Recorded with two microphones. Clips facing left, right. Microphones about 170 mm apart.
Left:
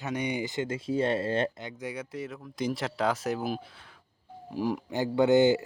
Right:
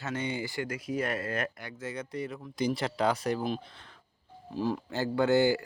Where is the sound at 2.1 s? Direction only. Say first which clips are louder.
Right 1 dB; centre (ahead or behind).